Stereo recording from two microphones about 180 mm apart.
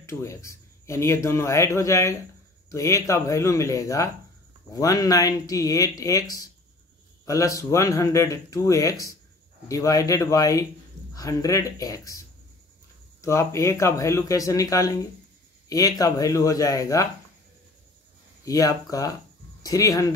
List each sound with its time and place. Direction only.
0.0 s speech: 15° left (ahead or behind)
18.4 s speech: 20° left (ahead or behind)